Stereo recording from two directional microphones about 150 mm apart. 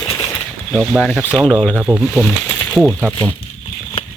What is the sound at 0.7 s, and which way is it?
Speech, centre (ahead or behind).